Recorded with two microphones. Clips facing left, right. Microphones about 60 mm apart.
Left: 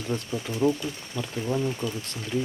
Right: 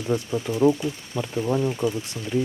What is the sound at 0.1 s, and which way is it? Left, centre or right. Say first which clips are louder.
Speech: right 6 dB; centre.